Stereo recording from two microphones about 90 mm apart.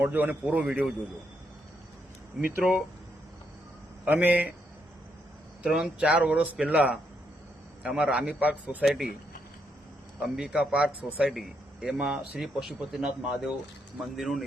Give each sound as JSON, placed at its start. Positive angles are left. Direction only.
{"t": 0.0, "sound": "speech", "side_deg": -20}
{"t": 2.5, "sound": "speech", "side_deg": -15}
{"t": 4.0, "sound": "speech", "side_deg": -20}
{"t": 5.6, "sound": "speech", "side_deg": -5}
{"t": 10.2, "sound": "speech", "side_deg": -5}